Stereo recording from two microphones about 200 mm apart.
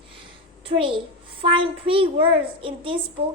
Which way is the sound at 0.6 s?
25° right (ahead or behind).